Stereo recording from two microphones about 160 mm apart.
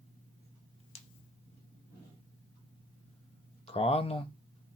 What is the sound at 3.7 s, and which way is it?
Speech, 40° left (ahead or behind).